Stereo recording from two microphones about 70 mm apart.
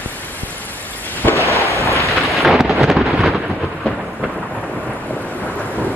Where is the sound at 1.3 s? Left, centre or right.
Right.